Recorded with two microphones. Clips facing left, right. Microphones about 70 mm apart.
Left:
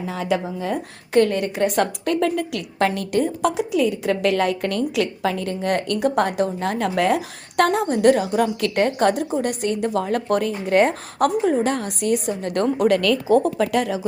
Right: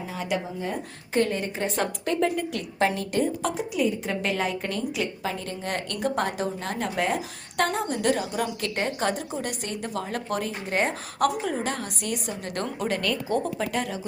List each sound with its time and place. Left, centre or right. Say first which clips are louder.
0.6 s a woman's voice: left 6 dB; left
6.9 s a woman's voice: left 7 dB; left
13.0 s speech: left 9 dB; left
13.4 s a woman's voice: left 8 dB; left